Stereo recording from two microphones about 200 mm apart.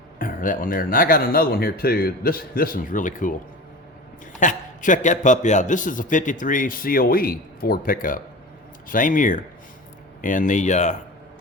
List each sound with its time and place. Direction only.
0.2 s speech: 45° left (ahead or behind)
4.4 s a man's voice: 40° left (ahead or behind)